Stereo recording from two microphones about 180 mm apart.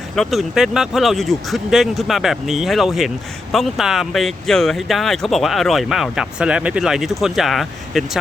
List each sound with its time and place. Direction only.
0.2 s speech: centre (ahead or behind)